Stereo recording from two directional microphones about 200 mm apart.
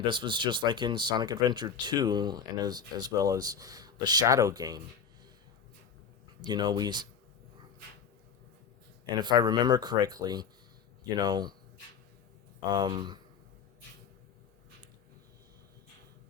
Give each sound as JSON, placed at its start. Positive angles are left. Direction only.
{"t": 0.0, "sound": "speech", "side_deg": -25}
{"t": 6.4, "sound": "speech", "side_deg": -20}
{"t": 9.0, "sound": "speech", "side_deg": -20}
{"t": 12.6, "sound": "speech", "side_deg": -20}